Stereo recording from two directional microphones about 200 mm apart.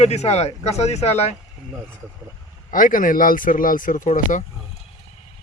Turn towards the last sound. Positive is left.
turn(degrees=40)  # may be behind; listen again after turning